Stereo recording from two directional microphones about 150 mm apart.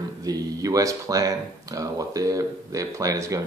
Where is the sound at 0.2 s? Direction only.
25° right (ahead or behind).